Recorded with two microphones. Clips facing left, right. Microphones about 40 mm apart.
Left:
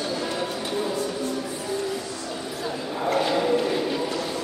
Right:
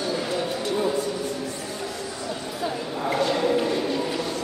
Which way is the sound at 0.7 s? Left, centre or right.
Centre.